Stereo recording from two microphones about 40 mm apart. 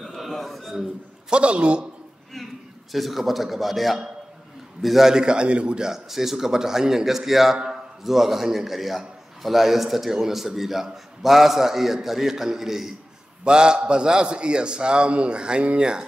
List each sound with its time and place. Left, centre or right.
0.0 s a sound: centre
1.3 s a man's voice: right
2.3 s a man's voice: centre
5.1 s a man's voice: right
5.9 s a man's voice: centre
7.5 s a man's voice: centre
8.0 s a man's voice: centre
13.4 s a man's voice: right